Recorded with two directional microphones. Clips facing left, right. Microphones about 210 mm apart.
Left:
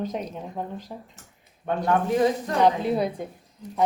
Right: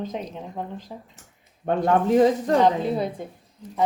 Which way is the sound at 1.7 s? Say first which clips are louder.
Right 3 dB; 30° right (ahead or behind).